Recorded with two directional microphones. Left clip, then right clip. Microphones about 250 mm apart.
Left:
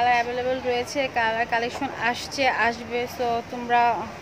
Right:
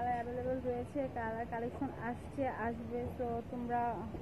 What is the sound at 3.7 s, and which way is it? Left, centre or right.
Speech, centre.